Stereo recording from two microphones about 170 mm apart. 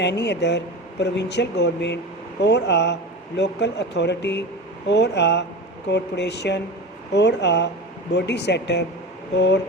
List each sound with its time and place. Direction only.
0.0 s a man's voice: 90° left